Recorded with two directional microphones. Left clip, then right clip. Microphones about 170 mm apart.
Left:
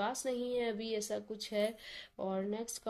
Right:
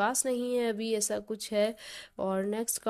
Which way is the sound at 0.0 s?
35° right (ahead or behind).